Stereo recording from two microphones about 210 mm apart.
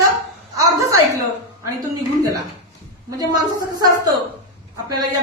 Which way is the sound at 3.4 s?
15° right (ahead or behind).